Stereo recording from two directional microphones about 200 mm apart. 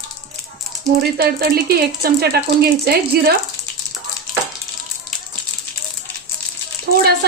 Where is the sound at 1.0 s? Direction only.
50° right (ahead or behind).